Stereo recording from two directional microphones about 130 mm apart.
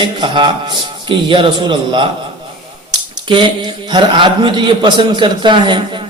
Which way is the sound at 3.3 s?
35° right (ahead or behind).